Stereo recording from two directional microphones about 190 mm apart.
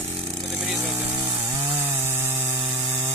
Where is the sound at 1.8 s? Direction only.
10° right (ahead or behind).